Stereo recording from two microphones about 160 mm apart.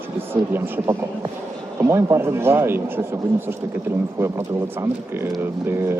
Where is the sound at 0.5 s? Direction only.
15° right (ahead or behind).